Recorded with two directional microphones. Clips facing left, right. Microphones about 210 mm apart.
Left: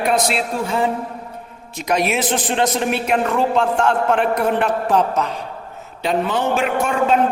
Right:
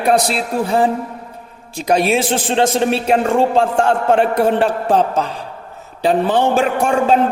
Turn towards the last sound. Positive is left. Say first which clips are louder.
# right 3 dB
turn(degrees=-35)  # may be behind; listen again after turning